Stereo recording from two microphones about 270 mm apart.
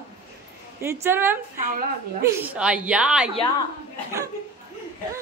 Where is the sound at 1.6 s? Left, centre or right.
Right.